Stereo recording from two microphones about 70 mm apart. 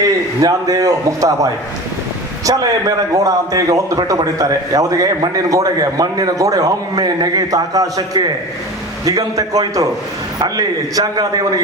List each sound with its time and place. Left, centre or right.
0.0 s a man's voice: right